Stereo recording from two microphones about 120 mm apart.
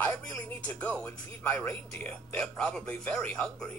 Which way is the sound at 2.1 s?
5° left (ahead or behind).